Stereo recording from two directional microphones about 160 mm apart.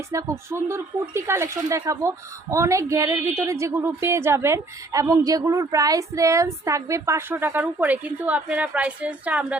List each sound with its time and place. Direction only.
0.1 s speech: 15° right (ahead or behind)